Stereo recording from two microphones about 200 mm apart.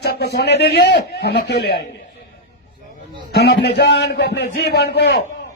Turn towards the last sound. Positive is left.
turn(degrees=55)  # may be behind; listen again after turning